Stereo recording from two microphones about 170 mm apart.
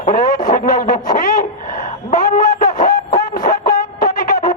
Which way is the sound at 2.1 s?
55° left (ahead or behind).